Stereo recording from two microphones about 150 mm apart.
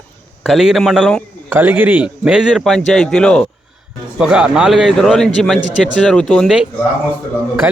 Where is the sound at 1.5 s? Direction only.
15° right (ahead or behind); by 3.4 s 5° left (ahead or behind).